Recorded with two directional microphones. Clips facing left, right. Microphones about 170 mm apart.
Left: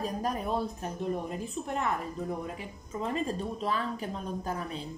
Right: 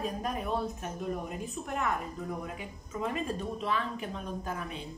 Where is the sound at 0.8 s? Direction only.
35° left (ahead or behind).